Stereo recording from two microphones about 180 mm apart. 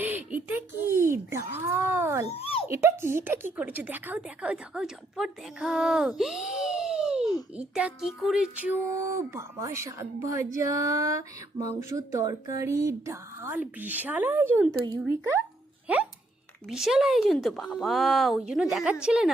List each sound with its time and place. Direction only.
0.0 s speech: 10° right (ahead or behind)
2.3 s a sound: 30° left (ahead or behind)
2.6 s a woman's voice: 15° right (ahead or behind)